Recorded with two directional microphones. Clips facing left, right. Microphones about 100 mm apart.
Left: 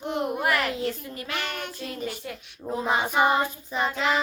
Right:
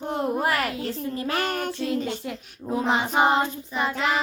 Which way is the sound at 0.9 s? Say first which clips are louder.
Right 4 dB; 30° right (ahead or behind).